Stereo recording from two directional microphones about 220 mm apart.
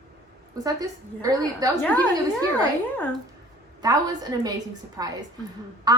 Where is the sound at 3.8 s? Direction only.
15° right (ahead or behind).